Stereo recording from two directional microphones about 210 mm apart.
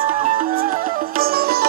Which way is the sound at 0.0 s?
40° right (ahead or behind).